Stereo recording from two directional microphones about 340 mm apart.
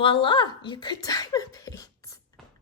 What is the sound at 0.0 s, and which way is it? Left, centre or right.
Speech, centre.